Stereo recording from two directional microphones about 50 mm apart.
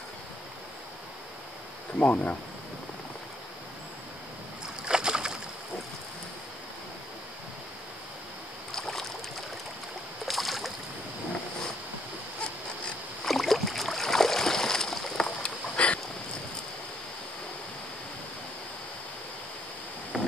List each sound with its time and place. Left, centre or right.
2.0 s speech: left
4.8 s boat: centre
8.7 s rowboat: centre
10.2 s boat: centre
13.2 s boat: centre; by 16.0 s left